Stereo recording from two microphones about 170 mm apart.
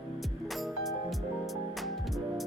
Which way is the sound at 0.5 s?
Centre (ahead or behind).